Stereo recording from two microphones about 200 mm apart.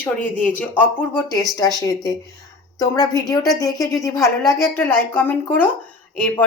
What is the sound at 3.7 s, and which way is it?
Speech, 20° left (ahead or behind).